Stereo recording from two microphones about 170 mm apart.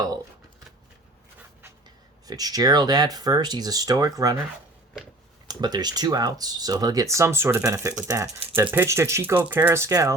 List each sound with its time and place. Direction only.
2.2 s speech: 20° right (ahead or behind)
5.5 s speech: 25° right (ahead or behind)